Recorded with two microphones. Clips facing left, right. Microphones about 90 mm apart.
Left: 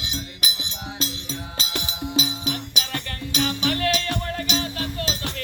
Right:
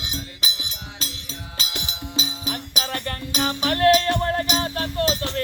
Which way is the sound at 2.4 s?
40° right (ahead or behind).